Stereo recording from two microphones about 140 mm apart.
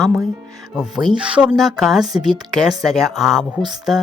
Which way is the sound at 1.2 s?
10° right (ahead or behind).